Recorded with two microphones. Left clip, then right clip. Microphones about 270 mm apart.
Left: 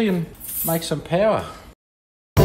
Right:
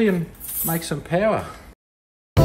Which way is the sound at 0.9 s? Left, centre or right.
Centre.